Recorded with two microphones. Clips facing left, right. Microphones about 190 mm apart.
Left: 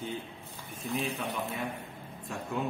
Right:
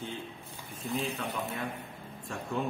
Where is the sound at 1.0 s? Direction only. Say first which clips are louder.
Left 1 dB; 15° left (ahead or behind).